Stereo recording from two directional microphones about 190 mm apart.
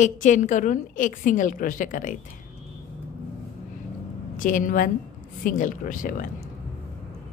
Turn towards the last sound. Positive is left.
turn(degrees=45)  # may be behind; listen again after turning